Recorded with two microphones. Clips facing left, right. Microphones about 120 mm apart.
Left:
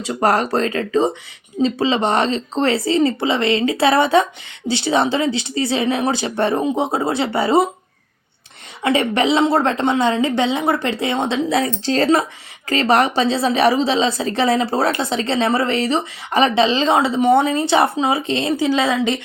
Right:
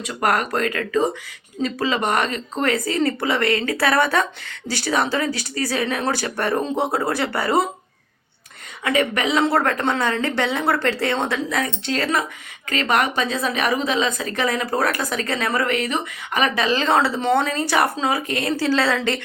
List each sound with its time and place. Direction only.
0.0 s a woman's voice: 30° left (ahead or behind)
8.8 s a woman's voice: 30° left (ahead or behind)
11.4 s a woman's voice: 30° left (ahead or behind)